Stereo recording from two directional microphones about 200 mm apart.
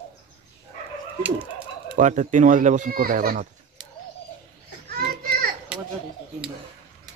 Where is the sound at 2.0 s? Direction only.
40° right (ahead or behind).